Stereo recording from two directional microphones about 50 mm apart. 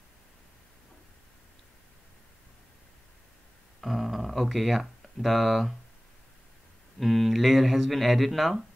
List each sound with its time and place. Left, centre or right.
3.8 s speech: centre
7.0 s speech: centre